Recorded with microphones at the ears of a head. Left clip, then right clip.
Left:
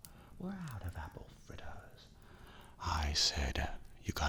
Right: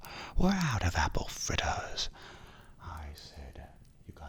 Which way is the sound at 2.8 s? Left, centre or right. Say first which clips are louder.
Left 14 dB; left.